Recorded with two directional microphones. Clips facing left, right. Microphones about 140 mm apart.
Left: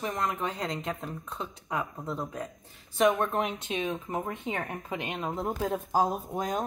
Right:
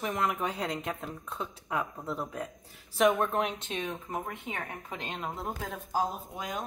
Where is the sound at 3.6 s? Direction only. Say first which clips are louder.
Left 4 dB; 15° left (ahead or behind).